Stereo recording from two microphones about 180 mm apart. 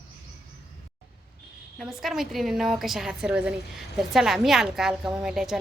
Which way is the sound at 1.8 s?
Centre (ahead or behind).